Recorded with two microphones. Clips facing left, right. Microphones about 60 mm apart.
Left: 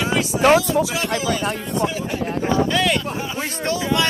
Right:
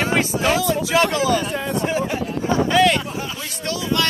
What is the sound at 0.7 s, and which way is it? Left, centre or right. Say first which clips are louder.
Speech: right 2 dB; right.